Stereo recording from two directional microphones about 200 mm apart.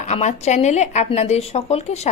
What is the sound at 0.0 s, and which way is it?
A woman's voice, 35° left (ahead or behind).